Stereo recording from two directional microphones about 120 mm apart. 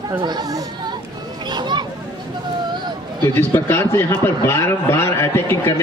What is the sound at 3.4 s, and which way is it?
A man's voice, 20° left (ahead or behind).